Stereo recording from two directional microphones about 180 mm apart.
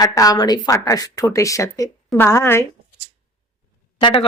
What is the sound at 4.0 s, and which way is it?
Speech, 25° left (ahead or behind).